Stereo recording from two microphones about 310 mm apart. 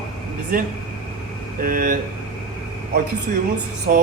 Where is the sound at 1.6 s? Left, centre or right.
Right.